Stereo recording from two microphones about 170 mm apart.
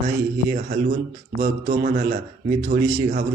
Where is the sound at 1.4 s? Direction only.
45° right (ahead or behind).